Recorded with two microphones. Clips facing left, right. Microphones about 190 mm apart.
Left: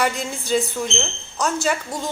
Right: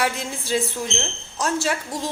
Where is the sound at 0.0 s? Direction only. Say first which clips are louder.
Left 2 dB; centre (ahead or behind).